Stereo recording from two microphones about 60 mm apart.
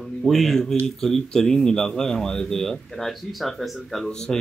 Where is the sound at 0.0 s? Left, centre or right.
Centre.